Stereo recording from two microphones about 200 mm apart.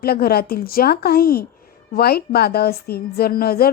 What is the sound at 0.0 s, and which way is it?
A woman's voice, 50° left (ahead or behind).